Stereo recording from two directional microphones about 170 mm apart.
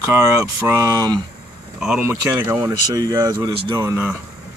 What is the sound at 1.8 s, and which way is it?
Speech, 10° right (ahead or behind).